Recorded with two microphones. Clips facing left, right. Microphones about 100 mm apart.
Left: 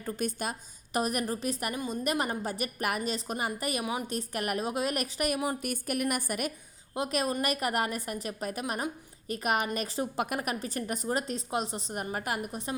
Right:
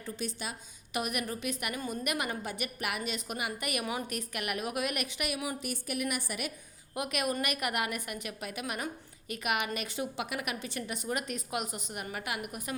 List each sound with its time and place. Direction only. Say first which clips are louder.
0.0 s a woman's voice: left 5 dB; 50° left (ahead or behind)
0.9 s a woman's voice: left 4 dB; 35° left (ahead or behind)
3.8 s a woman's voice: left 3 dB; 20° left (ahead or behind)
4.2 s a woman's voice: left 4 dB; 35° left (ahead or behind)
6.9 s a woman's voice: left 3 dB; 30° left (ahead or behind)